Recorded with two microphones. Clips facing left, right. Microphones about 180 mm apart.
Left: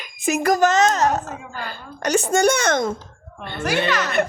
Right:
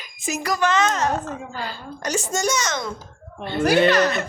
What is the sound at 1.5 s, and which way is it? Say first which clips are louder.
A woman's voice: right 1 dB; 60° left (ahead or behind).